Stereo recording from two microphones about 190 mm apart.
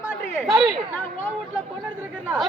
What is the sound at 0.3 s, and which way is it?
Speech, 5° right (ahead or behind).